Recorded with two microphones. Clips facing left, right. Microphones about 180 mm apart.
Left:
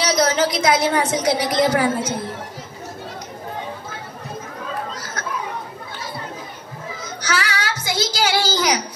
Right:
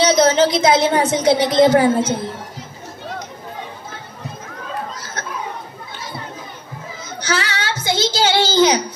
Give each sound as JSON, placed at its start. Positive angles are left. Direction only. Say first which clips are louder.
{"t": 0.0, "sound": "a woman's voice", "louder": "right 5 dB", "side_deg": -25}
{"t": 7.2, "sound": "child singing", "louder": "right 2 dB", "side_deg": -25}
{"t": 7.8, "sound": "a sound", "louder": "right 5 dB", "side_deg": -25}